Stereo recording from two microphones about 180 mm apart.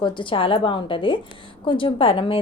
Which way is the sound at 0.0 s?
25° left (ahead or behind).